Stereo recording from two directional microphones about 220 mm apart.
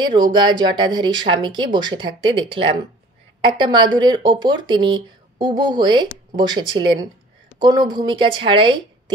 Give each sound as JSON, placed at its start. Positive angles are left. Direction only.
{"t": 0.0, "sound": "speech", "side_deg": -20}